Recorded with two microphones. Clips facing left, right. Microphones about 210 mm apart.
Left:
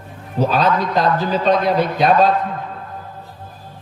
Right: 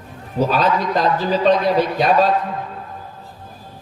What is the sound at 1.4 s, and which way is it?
Speech, 55° left (ahead or behind).